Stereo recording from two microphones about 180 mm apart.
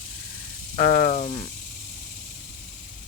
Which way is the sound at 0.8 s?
45° left (ahead or behind).